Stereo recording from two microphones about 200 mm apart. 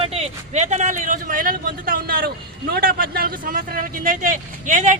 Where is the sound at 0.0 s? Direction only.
30° right (ahead or behind).